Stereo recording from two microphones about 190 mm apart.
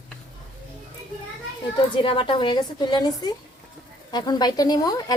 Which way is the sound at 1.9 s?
25° left (ahead or behind).